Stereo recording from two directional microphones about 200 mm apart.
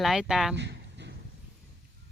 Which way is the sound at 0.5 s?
60° right (ahead or behind).